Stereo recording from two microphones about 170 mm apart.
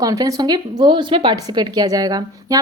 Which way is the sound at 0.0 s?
20° right (ahead or behind).